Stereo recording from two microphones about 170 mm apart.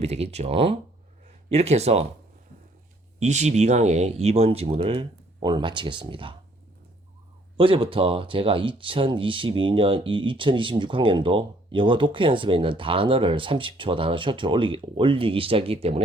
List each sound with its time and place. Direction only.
0.0 s speech: 40° right (ahead or behind)
3.2 s speech: 40° right (ahead or behind)
7.5 s speech: 30° right (ahead or behind)